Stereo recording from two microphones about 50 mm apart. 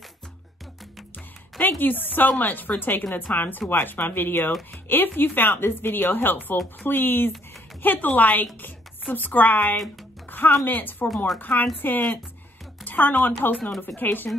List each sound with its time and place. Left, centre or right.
1.6 s speech: left